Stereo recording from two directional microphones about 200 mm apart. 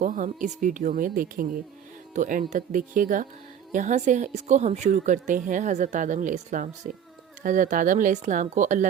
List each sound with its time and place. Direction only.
0.0 s a woman's voice: 40° right (ahead or behind)